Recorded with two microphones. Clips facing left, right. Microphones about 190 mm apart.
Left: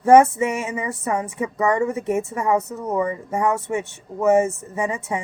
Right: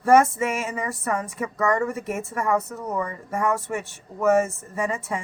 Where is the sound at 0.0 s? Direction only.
20° left (ahead or behind).